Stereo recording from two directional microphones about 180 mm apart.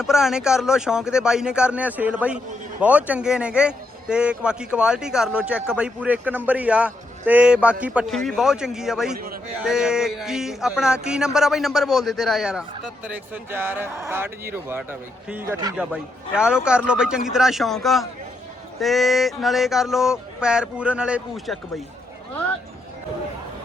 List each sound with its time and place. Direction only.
0.0 s a man's voice: centre (ahead or behind)
9.1 s a man's voice: 55° right (ahead or behind)
9.6 s a man's voice: 5° right (ahead or behind)